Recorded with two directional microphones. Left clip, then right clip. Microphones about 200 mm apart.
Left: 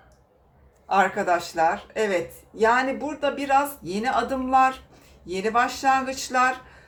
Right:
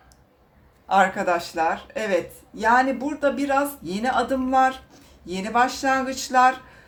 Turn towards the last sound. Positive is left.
turn(degrees=-20)  # may be behind; listen again after turning